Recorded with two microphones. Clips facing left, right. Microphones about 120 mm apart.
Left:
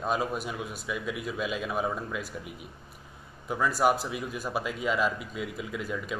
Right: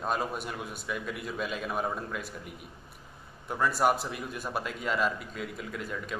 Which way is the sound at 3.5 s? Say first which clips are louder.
Left 1 dB; centre (ahead or behind).